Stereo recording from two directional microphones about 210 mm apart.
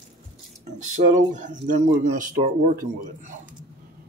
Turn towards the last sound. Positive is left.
turn(degrees=-40)  # may be behind; listen again after turning